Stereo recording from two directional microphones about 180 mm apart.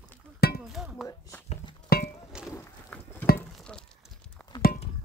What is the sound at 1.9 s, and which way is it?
Chink, 55° left (ahead or behind).